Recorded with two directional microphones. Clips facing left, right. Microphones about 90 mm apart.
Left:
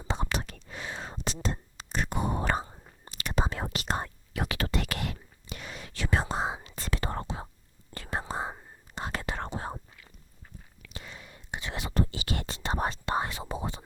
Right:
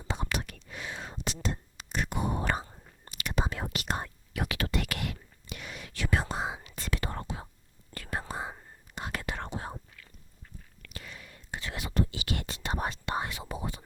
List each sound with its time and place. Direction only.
0.1 s whispering: 30° left (ahead or behind)
2.6 s whispering: 15° left (ahead or behind)
3.1 s whispering: 35° left (ahead or behind)
10.9 s whispering: 25° left (ahead or behind)